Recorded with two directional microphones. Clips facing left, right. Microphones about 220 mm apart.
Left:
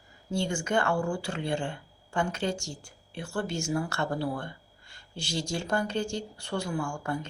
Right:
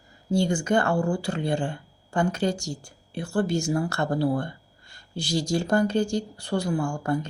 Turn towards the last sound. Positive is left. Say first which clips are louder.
# right 6 dB
turn(degrees=-40)  # may be behind; listen again after turning